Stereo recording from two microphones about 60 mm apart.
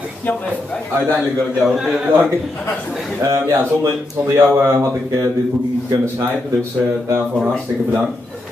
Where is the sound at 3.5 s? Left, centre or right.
Right.